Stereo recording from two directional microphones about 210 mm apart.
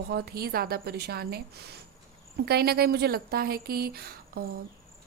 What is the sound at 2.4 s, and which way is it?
A woman's voice, 50° right (ahead or behind).